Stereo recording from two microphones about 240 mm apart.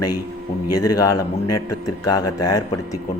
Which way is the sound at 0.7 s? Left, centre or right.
Centre.